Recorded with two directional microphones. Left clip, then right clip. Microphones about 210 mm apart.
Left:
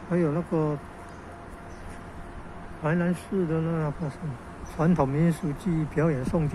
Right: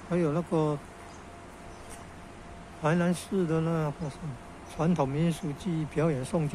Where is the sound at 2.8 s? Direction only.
20° right (ahead or behind).